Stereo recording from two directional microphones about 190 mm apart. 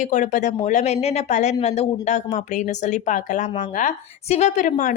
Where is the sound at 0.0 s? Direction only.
40° left (ahead or behind).